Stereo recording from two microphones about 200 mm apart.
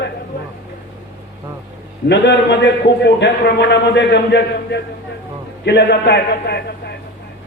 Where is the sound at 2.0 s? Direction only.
60° left (ahead or behind).